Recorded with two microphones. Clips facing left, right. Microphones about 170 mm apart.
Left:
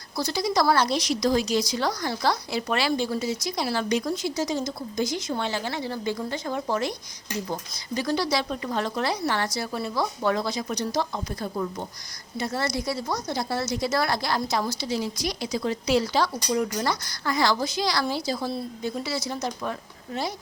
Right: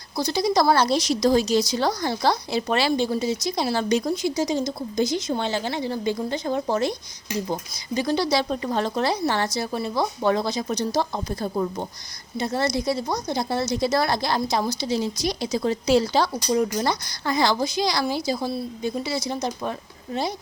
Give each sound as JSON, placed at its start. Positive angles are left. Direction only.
{"t": 0.2, "sound": "speech", "side_deg": -20}
{"t": 4.1, "sound": "speech", "side_deg": -15}
{"t": 12.4, "sound": "speech", "side_deg": -20}